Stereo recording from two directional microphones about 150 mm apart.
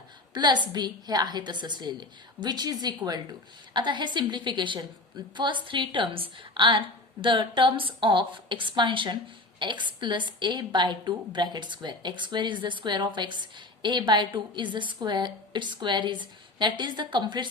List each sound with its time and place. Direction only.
0.3 s a woman's voice: 30° right (ahead or behind)